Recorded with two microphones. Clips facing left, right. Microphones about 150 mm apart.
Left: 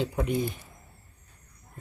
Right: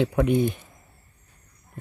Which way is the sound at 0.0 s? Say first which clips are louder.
Right 7 dB; 65° right (ahead or behind).